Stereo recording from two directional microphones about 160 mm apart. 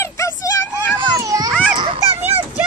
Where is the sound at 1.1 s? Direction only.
20° right (ahead or behind).